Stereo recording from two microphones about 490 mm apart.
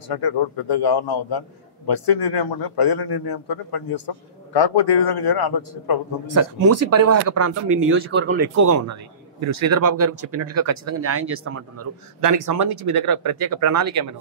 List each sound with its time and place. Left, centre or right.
0.7 s a man's voice: left
6.2 s speech: right
7.9 s a man's voice: right
8.5 s a man's voice: right
12.2 s speech: right
13.6 s speech: right